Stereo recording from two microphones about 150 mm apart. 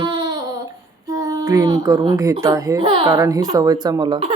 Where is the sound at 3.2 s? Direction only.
25° right (ahead or behind).